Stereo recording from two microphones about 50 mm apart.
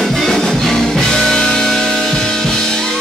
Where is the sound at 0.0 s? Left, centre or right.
Centre.